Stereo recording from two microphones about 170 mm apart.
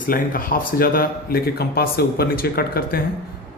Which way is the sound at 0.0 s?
55° left (ahead or behind).